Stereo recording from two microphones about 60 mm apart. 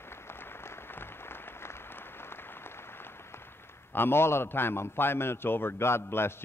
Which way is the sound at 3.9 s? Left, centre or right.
Left.